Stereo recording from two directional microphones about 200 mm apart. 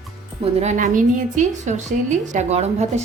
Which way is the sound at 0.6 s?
40° right (ahead or behind).